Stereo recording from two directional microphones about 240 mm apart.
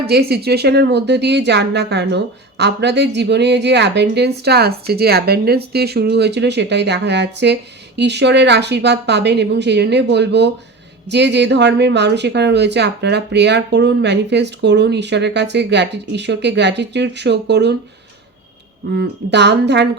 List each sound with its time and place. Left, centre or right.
0.1 s a woman's voice: right
18.9 s a woman's voice: right